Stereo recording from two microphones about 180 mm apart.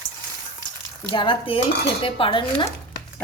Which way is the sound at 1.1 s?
25° left (ahead or behind).